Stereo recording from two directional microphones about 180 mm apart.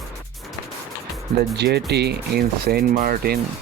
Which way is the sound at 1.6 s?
70° right (ahead or behind).